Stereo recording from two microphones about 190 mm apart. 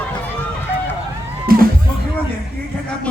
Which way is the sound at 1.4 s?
50° right (ahead or behind).